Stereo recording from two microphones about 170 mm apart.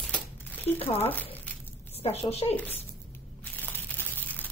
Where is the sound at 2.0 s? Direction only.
35° left (ahead or behind).